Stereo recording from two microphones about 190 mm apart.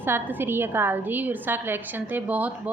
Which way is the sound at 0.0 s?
10° right (ahead or behind).